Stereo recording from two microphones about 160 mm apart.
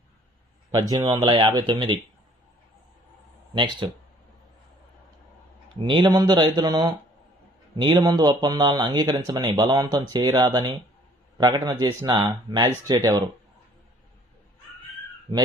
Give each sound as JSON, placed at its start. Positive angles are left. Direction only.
{"t": 0.7, "sound": "speech", "side_deg": -25}
{"t": 3.5, "sound": "speech", "side_deg": -30}
{"t": 5.8, "sound": "speech", "side_deg": -30}